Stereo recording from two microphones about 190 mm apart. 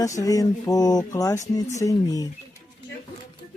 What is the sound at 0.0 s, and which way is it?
Speech, 15° left (ahead or behind).